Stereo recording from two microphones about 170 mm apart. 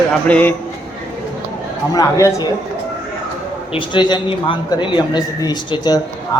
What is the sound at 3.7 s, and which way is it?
A man's voice, 25° left (ahead or behind).